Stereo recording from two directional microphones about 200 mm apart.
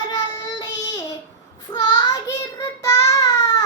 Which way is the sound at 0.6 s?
20° left (ahead or behind).